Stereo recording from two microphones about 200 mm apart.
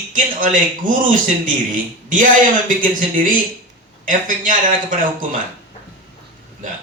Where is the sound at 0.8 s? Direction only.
45° right (ahead or behind).